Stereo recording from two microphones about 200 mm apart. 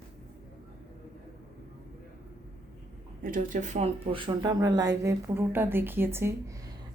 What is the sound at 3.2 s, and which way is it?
Speech, 45° right (ahead or behind).